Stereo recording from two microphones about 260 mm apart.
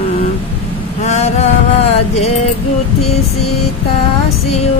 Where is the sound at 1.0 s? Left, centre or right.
Left.